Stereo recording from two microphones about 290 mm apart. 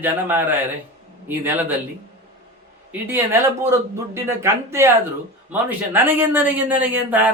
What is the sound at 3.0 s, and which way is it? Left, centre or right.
A man's voice, centre.